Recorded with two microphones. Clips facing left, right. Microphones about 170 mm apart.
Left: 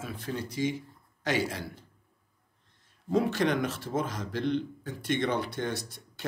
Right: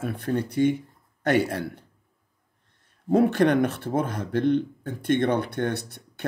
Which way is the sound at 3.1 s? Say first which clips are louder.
Right 7 dB; 60° right (ahead or behind).